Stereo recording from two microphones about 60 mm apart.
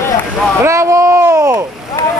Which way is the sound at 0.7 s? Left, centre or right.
Right.